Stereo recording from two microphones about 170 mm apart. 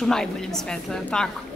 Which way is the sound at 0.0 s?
5° left (ahead or behind).